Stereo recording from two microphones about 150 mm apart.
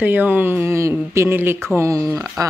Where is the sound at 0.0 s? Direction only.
10° right (ahead or behind).